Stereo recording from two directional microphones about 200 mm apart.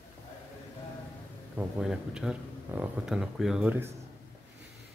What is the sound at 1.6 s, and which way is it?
Speech, 5° right (ahead or behind).